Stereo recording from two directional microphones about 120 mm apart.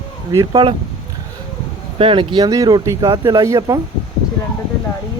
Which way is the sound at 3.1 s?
45° right (ahead or behind).